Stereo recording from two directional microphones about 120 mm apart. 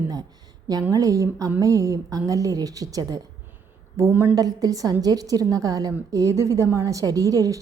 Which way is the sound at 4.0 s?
15° right (ahead or behind).